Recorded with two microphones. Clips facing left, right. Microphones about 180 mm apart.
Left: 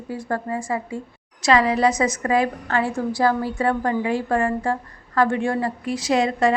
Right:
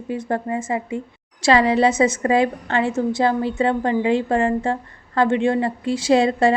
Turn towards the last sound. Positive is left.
turn(degrees=-30)  # may be behind; listen again after turning